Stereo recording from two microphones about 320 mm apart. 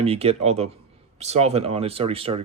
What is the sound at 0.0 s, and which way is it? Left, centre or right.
Speech, centre.